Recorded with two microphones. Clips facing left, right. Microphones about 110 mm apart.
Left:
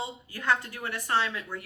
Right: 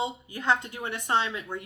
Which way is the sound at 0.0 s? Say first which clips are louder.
Right 4 dB; 20° right (ahead or behind).